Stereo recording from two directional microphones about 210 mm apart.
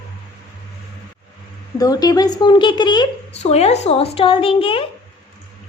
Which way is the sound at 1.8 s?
20° left (ahead or behind).